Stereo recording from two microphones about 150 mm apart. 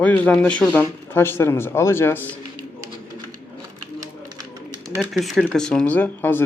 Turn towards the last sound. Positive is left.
turn(degrees=15)  # may be behind; listen again after turning